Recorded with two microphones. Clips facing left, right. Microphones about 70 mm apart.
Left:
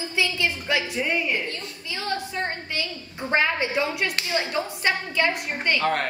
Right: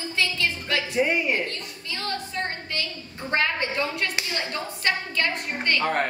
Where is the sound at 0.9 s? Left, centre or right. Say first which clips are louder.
Right 3 dB; centre.